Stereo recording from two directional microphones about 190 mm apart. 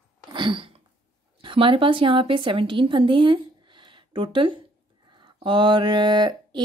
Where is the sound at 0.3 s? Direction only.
25° right (ahead or behind).